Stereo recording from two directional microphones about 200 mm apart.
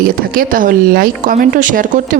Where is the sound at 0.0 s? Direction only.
45° right (ahead or behind).